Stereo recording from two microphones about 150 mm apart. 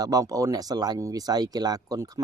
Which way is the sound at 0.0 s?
25° right (ahead or behind).